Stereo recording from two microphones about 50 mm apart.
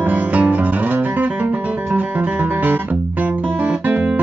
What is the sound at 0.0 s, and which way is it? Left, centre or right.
Music, right.